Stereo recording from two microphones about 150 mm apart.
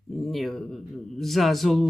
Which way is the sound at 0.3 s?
Centre (ahead or behind).